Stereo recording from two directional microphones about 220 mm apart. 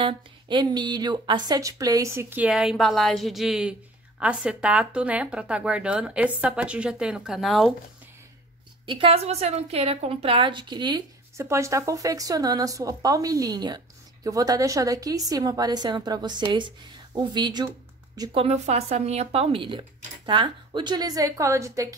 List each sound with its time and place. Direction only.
0.0 s a woman's voice: 20° right (ahead or behind); by 7.7 s centre (ahead or behind)
8.8 s a woman's voice: 25° right (ahead or behind)